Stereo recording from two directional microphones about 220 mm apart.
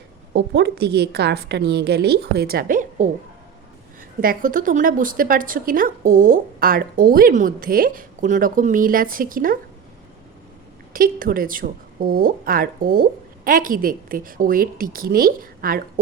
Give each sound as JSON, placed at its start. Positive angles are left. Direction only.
{"t": 0.3, "sound": "a woman's voice", "side_deg": -50}
{"t": 4.2, "sound": "a woman's voice", "side_deg": -40}
{"t": 10.9, "sound": "a woman's voice", "side_deg": -40}